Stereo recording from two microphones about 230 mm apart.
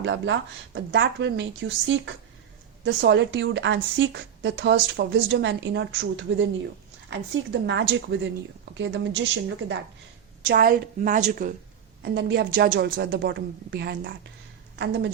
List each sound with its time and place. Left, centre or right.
0.0 s speech: right
7.7 s speech: right
10.4 s a woman's voice: right
12.0 s speech: right